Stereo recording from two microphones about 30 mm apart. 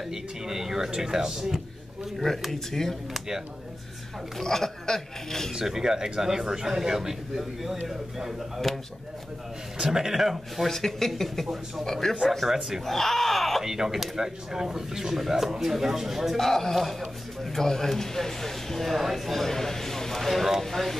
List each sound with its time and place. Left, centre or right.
0.1 s speech: centre
2.1 s speech: centre
4.4 s speech: centre
5.5 s speech: centre
8.6 s speech: centre
9.8 s speech: centre
10.7 s speech: centre
12.4 s speech: centre
12.8 s speech: centre
13.6 s speech: centre
15.1 s speech: centre
16.3 s speech: centre
19.4 s a sound: centre
20.6 s speech: centre